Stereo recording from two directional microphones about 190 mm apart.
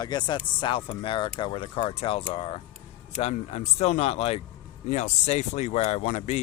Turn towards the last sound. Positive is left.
turn(degrees=35)  # may be behind; listen again after turning